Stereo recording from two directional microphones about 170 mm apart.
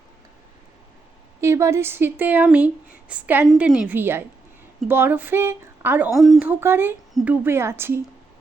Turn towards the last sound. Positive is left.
turn(degrees=-15)  # may be behind; listen again after turning